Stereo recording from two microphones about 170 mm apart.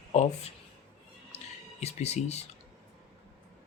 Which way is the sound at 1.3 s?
40° left (ahead or behind).